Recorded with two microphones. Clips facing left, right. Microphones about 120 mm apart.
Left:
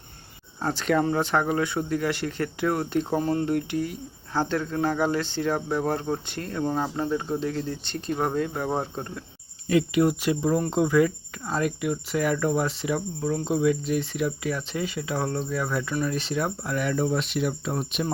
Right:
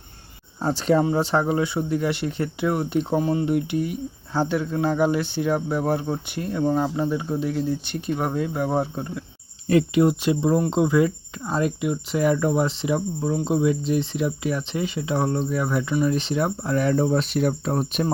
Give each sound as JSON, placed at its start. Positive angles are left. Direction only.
{"t": 0.6, "sound": "speech", "side_deg": -15}
{"t": 1.1, "sound": "speech", "side_deg": -25}
{"t": 3.2, "sound": "speech", "side_deg": -5}
{"t": 3.4, "sound": "speech", "side_deg": -20}
{"t": 9.6, "sound": "speech", "side_deg": -40}
{"t": 10.0, "sound": "speech", "side_deg": -25}